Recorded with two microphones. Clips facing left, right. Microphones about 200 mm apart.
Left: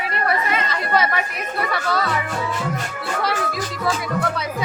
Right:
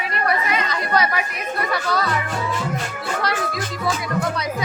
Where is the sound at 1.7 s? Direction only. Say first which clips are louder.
Even; centre (ahead or behind).